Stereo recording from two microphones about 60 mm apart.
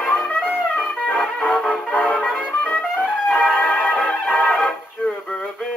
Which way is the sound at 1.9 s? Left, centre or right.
Left.